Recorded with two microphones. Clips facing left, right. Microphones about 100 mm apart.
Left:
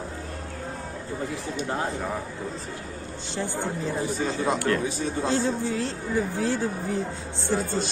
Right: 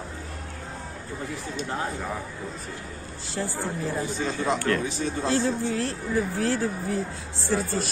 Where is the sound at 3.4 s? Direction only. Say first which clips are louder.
Left 1 dB; 25° left (ahead or behind).